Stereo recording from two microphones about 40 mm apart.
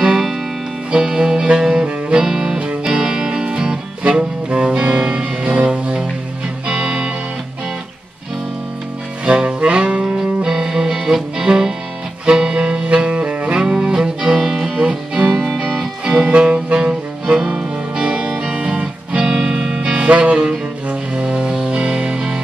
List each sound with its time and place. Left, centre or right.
0.9 s music: centre; by 5.7 s right
6.7 s music: centre
9.2 s music: right
16.3 s music: right
19.2 s music: centre